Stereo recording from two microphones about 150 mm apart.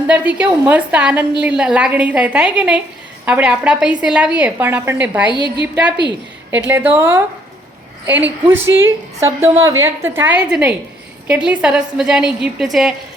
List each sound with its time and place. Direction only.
0.1 s a woman's voice: 10° right (ahead or behind)
6.5 s a woman's voice: 15° right (ahead or behind)